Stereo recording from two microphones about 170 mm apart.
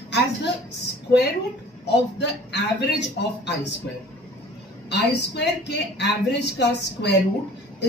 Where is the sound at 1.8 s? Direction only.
90° left.